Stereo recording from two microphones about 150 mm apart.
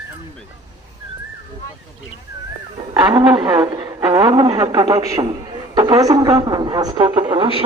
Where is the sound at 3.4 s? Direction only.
25° right (ahead or behind).